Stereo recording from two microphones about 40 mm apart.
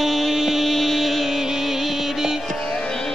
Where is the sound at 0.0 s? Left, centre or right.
Centre.